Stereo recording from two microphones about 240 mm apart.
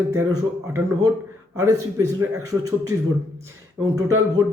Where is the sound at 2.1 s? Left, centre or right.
Centre.